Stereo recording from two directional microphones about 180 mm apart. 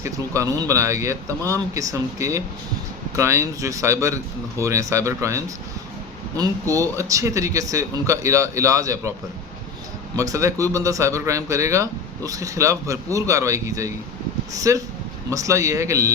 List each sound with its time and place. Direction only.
0.0 s a man's voice: 15° right (ahead or behind)
10.2 s a man's voice: 20° right (ahead or behind)